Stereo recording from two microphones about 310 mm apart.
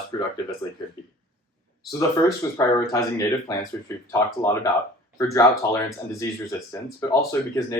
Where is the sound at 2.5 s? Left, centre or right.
Centre.